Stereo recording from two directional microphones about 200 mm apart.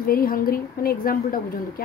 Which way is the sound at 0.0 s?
45° left (ahead or behind).